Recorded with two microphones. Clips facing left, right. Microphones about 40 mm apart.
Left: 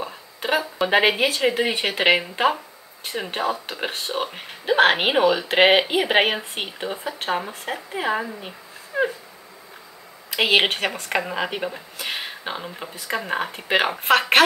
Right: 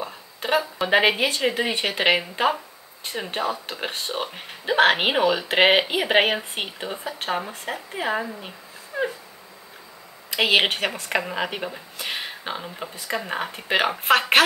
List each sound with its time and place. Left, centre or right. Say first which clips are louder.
0.0 s speech: left 2 dB; centre
8.9 s a sound: left 4 dB; left
10.3 s a woman's voice: left 1 dB; centre